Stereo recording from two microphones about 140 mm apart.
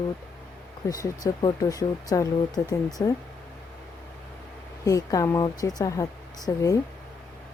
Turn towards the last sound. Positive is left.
turn(degrees=20)  # may be behind; listen again after turning